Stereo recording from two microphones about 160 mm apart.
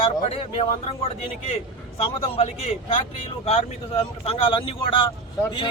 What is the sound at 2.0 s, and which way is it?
Speech, 35° left (ahead or behind).